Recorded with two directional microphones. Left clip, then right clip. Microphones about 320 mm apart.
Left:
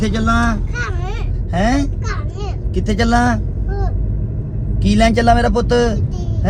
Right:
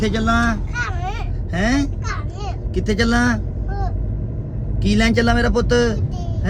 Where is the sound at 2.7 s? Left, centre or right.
Centre.